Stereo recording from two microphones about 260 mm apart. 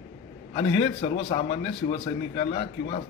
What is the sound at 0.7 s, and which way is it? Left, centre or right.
A man's voice, centre.